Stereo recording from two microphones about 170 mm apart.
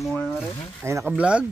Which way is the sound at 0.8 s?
15° right (ahead or behind).